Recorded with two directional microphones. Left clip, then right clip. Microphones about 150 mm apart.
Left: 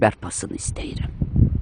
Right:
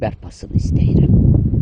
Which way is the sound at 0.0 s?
35° left (ahead or behind).